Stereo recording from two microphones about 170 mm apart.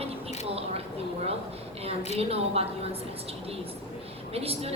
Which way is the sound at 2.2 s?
35° right (ahead or behind).